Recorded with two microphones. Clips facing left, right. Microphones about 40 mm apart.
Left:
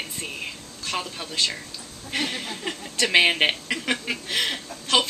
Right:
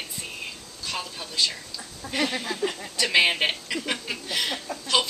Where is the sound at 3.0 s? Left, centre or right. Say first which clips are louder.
Left 2 dB; left.